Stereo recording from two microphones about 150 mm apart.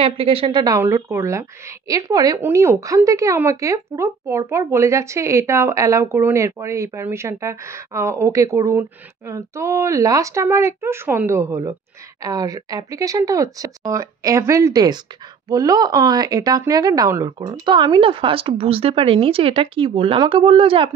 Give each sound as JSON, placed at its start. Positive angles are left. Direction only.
{"t": 0.0, "sound": "speech", "side_deg": -40}
{"t": 0.7, "sound": "a woman's voice", "side_deg": -20}